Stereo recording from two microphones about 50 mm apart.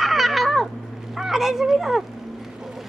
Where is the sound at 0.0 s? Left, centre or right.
Centre.